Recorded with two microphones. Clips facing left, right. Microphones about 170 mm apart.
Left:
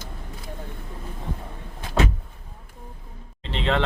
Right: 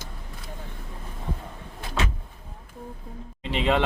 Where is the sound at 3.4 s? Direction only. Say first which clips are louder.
Right 1 dB; 10° right (ahead or behind).